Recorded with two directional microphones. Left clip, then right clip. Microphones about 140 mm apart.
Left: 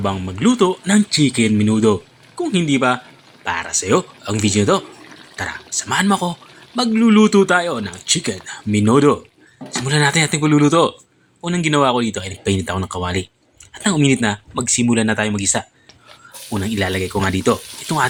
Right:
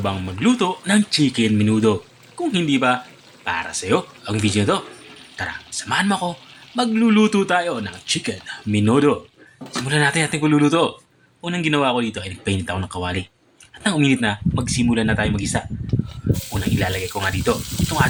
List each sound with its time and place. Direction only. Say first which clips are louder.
0.0 s speech: left 2 dB; 20° left (ahead or behind)